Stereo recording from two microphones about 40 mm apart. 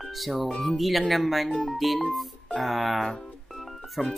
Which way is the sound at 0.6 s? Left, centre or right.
Centre.